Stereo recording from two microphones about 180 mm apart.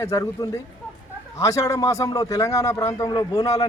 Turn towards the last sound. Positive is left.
turn(degrees=20)  # may be behind; listen again after turning